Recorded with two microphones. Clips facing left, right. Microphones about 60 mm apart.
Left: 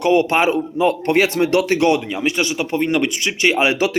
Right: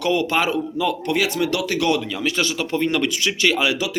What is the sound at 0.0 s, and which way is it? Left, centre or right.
Speech, left.